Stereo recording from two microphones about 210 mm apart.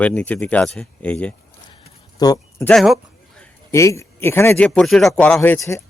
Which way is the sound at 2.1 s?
20° left (ahead or behind).